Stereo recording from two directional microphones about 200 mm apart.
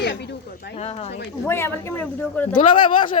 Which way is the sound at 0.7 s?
30° left (ahead or behind).